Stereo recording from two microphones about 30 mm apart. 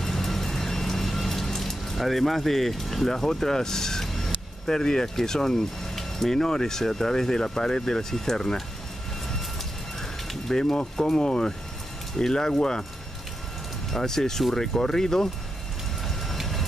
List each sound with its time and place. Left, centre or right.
0.0 s music: centre
3.1 s speech: centre
10.5 s speech: centre
13.8 s speech: centre